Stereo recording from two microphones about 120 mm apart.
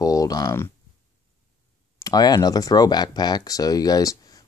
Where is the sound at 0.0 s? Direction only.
30° left (ahead or behind).